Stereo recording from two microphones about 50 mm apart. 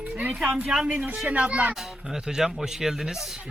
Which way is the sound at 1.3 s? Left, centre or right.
Right.